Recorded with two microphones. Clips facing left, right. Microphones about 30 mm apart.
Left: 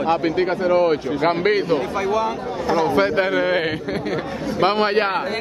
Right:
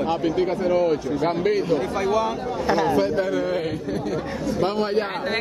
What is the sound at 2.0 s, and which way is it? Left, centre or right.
Speech, centre.